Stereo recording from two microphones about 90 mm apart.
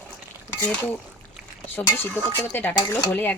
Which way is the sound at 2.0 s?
25° left (ahead or behind).